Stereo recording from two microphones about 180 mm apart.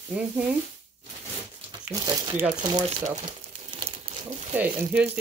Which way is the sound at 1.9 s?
20° right (ahead or behind).